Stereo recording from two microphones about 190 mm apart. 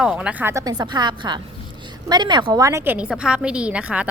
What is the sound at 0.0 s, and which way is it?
A woman's voice, 5° right (ahead or behind).